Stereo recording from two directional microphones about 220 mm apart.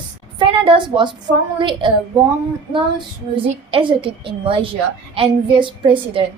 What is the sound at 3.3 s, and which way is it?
A woman's voice, 25° right (ahead or behind).